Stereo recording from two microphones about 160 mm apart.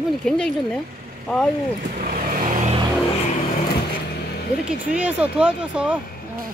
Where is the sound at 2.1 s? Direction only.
55° right (ahead or behind).